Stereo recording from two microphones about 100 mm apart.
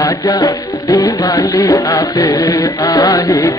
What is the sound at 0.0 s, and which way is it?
Music, 40° left (ahead or behind).